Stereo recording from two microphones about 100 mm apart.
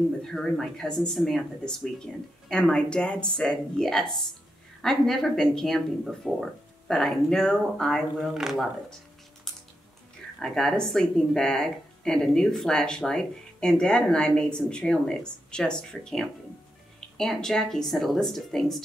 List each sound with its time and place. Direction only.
0.2 s speech: 5° left (ahead or behind)
10.4 s speech: 5° left (ahead or behind)